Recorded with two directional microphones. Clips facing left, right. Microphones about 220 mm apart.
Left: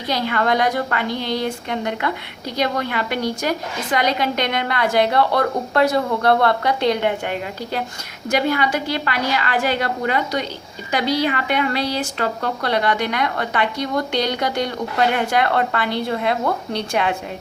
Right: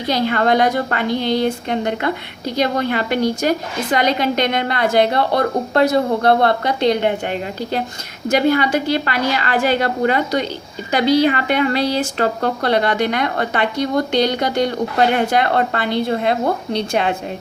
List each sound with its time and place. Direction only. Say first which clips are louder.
0.1 s a woman's voice: right 4 dB; 25° right (ahead or behind)